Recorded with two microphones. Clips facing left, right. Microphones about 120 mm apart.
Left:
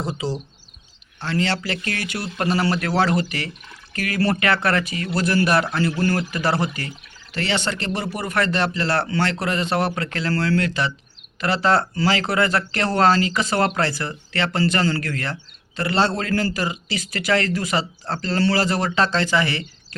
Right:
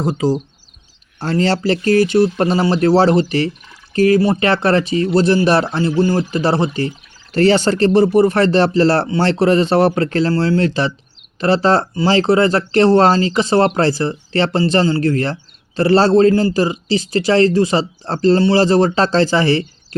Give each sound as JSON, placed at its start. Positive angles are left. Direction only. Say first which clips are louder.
{"t": 0.0, "sound": "speech", "louder": "right 9 dB", "side_deg": -45}
{"t": 5.9, "sound": "speech", "louder": "right 6 dB", "side_deg": -15}
{"t": 6.1, "sound": "speech", "louder": "right 6 dB", "side_deg": -30}
{"t": 7.3, "sound": "speech", "louder": "right 12 dB", "side_deg": -40}